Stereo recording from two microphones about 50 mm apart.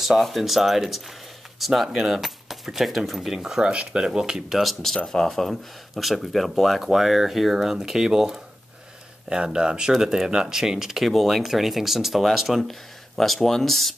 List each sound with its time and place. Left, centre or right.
0.0 s speech: centre
4.8 s speech: centre